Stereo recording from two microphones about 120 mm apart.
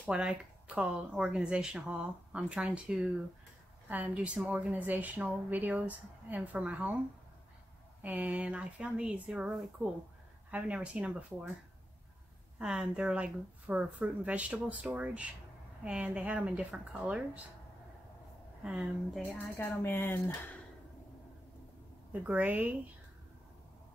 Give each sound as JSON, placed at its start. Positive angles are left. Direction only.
{"t": 0.1, "sound": "a woman's voice", "side_deg": -10}
{"t": 8.0, "sound": "a woman's voice", "side_deg": -10}
{"t": 12.5, "sound": "a woman's voice", "side_deg": -5}
{"t": 18.6, "sound": "speech", "side_deg": -10}
{"t": 19.3, "sound": "speech", "side_deg": 20}
{"t": 22.2, "sound": "a woman's voice", "side_deg": -15}